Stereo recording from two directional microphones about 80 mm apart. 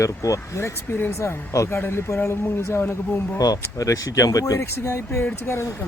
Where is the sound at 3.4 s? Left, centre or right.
Left.